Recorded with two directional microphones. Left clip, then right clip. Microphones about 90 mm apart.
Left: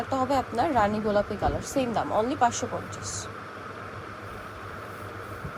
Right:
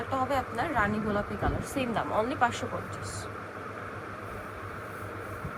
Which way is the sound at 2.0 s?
50° left (ahead or behind).